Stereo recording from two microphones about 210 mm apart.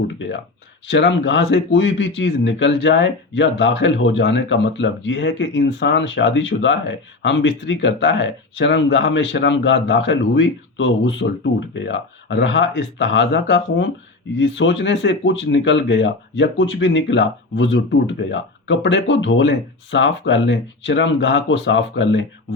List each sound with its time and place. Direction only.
0.9 s speech: 60° left (ahead or behind)